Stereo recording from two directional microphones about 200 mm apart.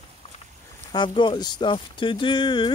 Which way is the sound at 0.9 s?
25° left (ahead or behind).